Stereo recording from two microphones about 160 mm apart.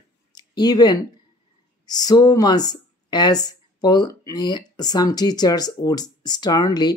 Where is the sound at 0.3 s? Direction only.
25° left (ahead or behind).